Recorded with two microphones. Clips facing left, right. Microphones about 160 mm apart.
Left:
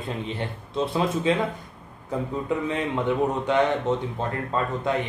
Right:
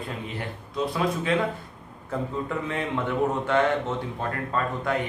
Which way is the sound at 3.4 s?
20° left (ahead or behind).